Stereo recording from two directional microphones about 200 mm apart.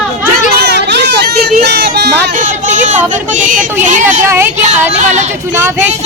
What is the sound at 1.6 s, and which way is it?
Speech, 55° right (ahead or behind).